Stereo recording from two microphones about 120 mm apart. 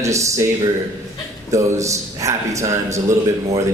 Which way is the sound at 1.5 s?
25° right (ahead or behind).